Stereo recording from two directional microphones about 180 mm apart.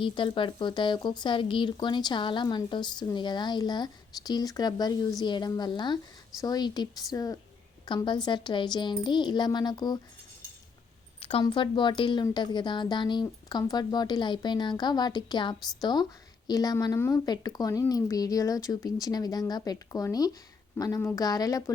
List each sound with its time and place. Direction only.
0.0 s speech: 25° left (ahead or behind)
11.2 s speech: 30° left (ahead or behind)